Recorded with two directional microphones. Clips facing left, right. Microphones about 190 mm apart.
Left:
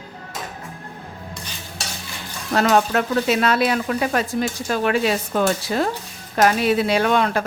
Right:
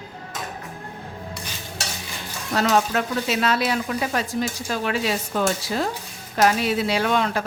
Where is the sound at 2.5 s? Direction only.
55° left (ahead or behind).